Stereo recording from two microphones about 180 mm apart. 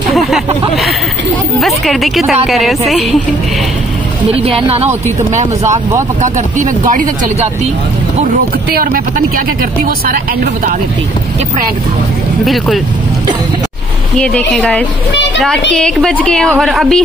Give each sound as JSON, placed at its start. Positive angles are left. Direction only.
{"t": 0.1, "sound": "a sound", "side_deg": 0}
{"t": 1.6, "sound": "a woman's voice", "side_deg": 0}
{"t": 4.3, "sound": "a woman's voice", "side_deg": -30}
{"t": 12.4, "sound": "a woman's voice", "side_deg": 0}
{"t": 14.1, "sound": "a woman's voice", "side_deg": 5}